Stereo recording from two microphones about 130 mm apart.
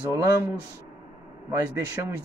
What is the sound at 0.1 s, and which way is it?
Speech, 25° right (ahead or behind).